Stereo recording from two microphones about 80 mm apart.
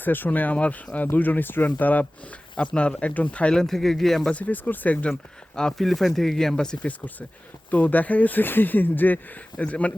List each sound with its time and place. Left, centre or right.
0.0 s speech: left; by 4.4 s centre
4.4 s speech: centre
5.5 s speech: centre